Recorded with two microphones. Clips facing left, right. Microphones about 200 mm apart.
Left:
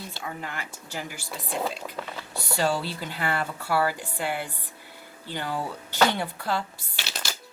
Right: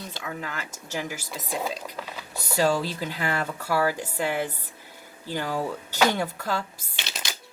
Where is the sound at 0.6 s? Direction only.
45° right (ahead or behind).